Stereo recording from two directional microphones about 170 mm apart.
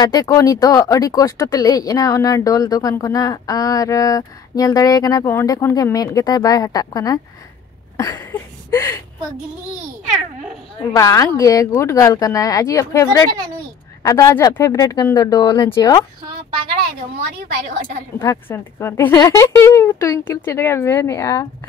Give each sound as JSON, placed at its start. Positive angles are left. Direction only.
{"t": 0.0, "sound": "speech", "side_deg": 20}
{"t": 8.0, "sound": "a sound", "side_deg": 15}
{"t": 10.8, "sound": "speech", "side_deg": 20}
{"t": 18.2, "sound": "speech", "side_deg": 15}